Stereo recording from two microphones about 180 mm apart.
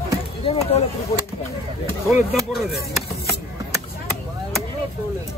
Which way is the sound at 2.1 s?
Centre (ahead or behind).